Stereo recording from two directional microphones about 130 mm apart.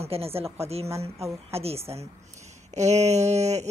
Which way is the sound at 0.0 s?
50° right (ahead or behind).